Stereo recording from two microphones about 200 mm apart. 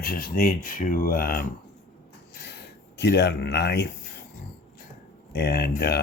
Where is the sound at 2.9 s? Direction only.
60° left (ahead or behind).